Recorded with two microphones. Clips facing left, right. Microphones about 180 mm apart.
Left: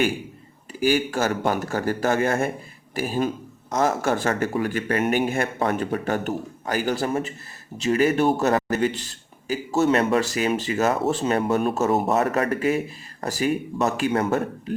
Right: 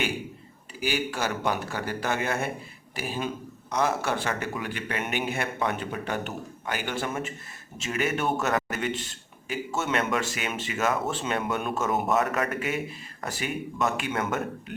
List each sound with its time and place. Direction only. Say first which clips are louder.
0.7 s a man's voice: left 8 dB; 45° left (ahead or behind)